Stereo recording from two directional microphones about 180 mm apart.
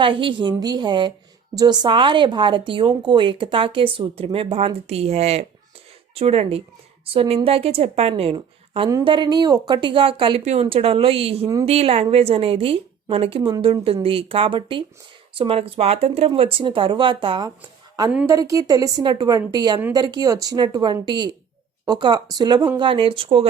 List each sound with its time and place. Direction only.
0.0 s a woman's voice: 30° right (ahead or behind)